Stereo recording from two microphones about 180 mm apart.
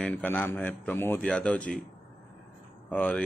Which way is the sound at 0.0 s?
10° left (ahead or behind).